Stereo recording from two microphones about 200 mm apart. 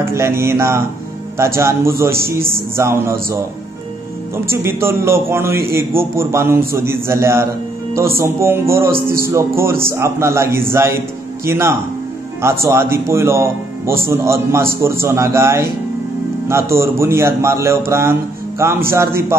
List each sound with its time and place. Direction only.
0.0 s speech: 15° right (ahead or behind)
4.5 s speech: 10° right (ahead or behind)